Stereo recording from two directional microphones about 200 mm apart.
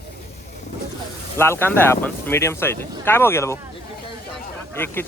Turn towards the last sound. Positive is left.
turn(degrees=10)  # may be behind; listen again after turning